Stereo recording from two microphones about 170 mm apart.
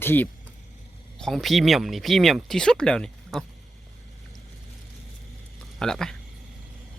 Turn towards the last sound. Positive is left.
turn(degrees=5)  # may be behind; listen again after turning